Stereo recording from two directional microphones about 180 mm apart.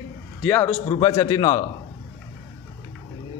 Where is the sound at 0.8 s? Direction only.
25° left (ahead or behind).